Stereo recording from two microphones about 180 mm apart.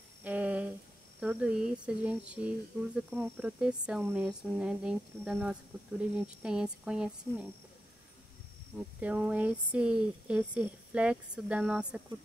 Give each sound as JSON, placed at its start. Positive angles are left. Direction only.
{"t": 0.2, "sound": "a sound", "side_deg": -10}
{"t": 1.2, "sound": "speech", "side_deg": -5}
{"t": 8.7, "sound": "speech", "side_deg": -5}